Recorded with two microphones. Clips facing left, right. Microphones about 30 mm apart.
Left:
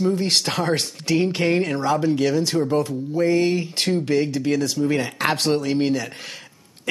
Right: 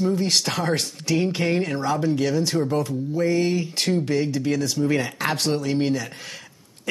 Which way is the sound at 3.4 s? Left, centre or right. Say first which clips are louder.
Left 2 dB; left.